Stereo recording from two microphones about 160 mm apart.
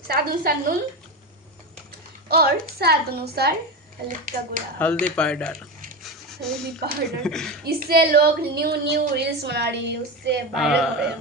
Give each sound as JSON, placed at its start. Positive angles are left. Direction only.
{"t": 0.1, "sound": "a woman's voice", "side_deg": -70}
{"t": 2.3, "sound": "a woman's voice", "side_deg": -75}
{"t": 4.1, "sound": "speech", "side_deg": -55}
{"t": 4.8, "sound": "speech", "side_deg": 10}
{"t": 6.0, "sound": "a sound", "side_deg": 0}
{"t": 7.2, "sound": "speech", "side_deg": 5}
{"t": 7.6, "sound": "speech", "side_deg": -75}
{"t": 10.5, "sound": "speech", "side_deg": 0}